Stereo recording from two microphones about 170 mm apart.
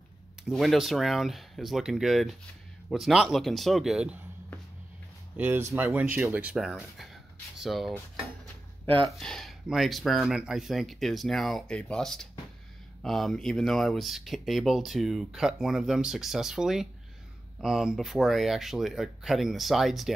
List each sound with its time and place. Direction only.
0.5 s speech: centre (ahead or behind)
5.4 s speech: 15° right (ahead or behind)
8.8 s speech: 30° right (ahead or behind)
9.2 s speech: centre (ahead or behind)